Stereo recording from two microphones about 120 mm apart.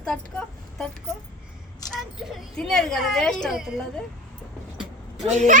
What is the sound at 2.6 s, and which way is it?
A woman's voice, centre (ahead or behind).